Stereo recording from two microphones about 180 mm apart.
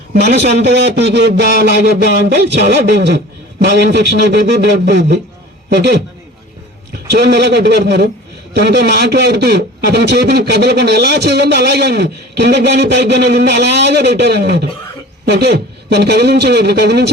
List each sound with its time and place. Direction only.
0.1 s a man's voice: 60° right (ahead or behind)